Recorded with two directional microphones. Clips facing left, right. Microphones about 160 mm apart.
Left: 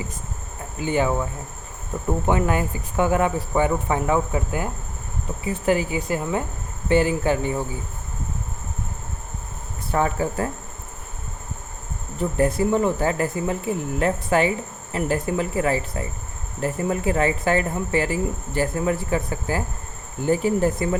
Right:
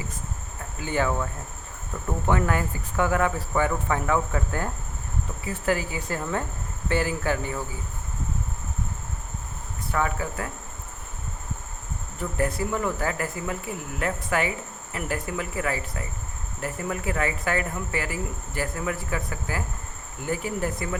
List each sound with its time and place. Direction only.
0.8 s speech: 20° left (ahead or behind)
9.9 s speech: 30° left (ahead or behind)
12.2 s speech: 25° left (ahead or behind)